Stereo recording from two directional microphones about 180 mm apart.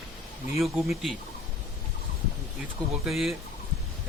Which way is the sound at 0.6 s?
Centre (ahead or behind).